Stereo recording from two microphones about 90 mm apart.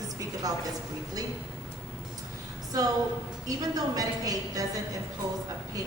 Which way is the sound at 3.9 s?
45° right (ahead or behind).